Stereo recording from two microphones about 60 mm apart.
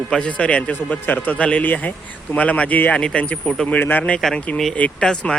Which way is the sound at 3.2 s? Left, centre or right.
Left.